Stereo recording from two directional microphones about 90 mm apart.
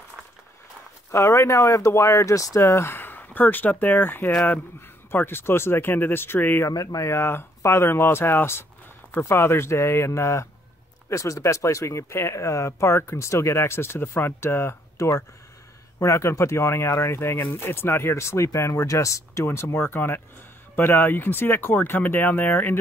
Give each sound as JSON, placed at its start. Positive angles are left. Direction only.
{"t": 1.1, "sound": "speech", "side_deg": 30}
{"t": 5.1, "sound": "speech", "side_deg": 25}
{"t": 6.7, "sound": "speech", "side_deg": 45}